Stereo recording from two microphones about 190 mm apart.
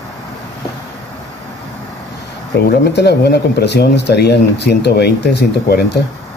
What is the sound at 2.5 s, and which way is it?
Speech, 60° left (ahead or behind).